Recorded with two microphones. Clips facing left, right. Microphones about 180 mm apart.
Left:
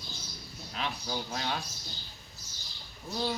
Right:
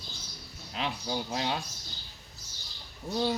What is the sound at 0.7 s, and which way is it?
Speech, 25° right (ahead or behind).